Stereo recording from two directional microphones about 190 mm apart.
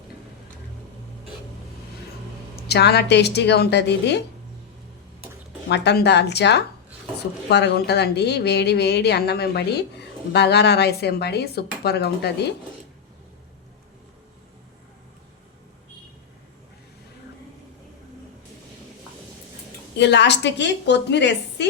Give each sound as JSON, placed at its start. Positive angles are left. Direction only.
{"t": 2.6, "sound": "a woman's voice", "side_deg": 60}
{"t": 5.6, "sound": "a woman's voice", "side_deg": 65}
{"t": 20.0, "sound": "a woman's voice", "side_deg": 65}